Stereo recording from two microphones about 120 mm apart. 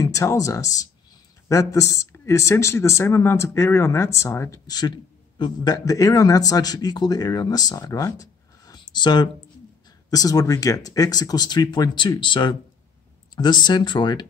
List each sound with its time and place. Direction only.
0.0 s speech: 25° left (ahead or behind)
4.6 s a man's voice: 35° left (ahead or behind)